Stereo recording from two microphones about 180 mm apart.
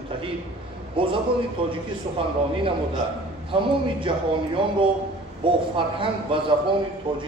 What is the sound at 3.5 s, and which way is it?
A man's voice, 25° right (ahead or behind).